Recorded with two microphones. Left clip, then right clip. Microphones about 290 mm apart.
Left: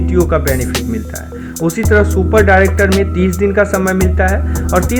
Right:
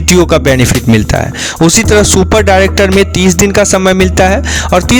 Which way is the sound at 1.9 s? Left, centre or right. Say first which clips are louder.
Right 4 dB; right.